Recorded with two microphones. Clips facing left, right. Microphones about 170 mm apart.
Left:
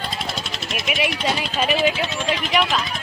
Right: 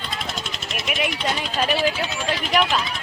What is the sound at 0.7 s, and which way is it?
Vehicle, 40° right (ahead or behind).